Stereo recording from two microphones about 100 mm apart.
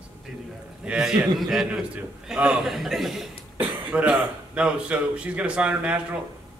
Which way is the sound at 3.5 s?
15° right (ahead or behind).